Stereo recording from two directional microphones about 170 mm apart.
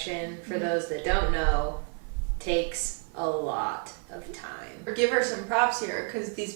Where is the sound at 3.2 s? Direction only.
15° right (ahead or behind).